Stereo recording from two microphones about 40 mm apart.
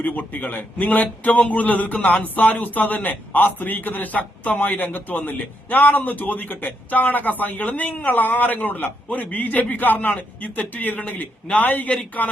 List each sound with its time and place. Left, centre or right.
0.0 s a man's voice: left